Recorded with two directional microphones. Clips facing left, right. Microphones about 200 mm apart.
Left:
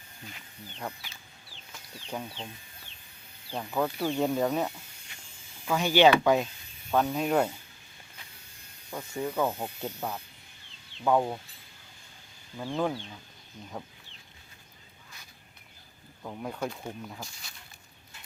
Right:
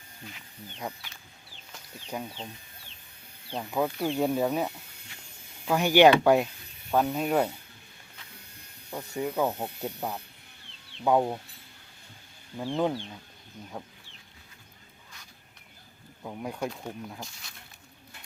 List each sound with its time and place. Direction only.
0.3 s speech: 10° right (ahead or behind)
2.0 s speech: 10° right (ahead or behind)
3.5 s speech: 10° right (ahead or behind)
9.1 s speech: 10° right (ahead or behind)
12.5 s speech: 15° right (ahead or behind)
16.2 s speech: 10° right (ahead or behind)